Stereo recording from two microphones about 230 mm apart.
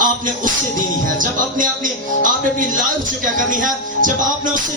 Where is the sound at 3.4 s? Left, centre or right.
Right.